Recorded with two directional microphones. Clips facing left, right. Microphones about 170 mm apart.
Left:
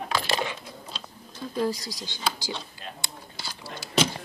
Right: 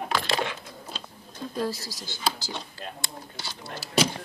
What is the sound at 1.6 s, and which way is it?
Speech, 15° left (ahead or behind).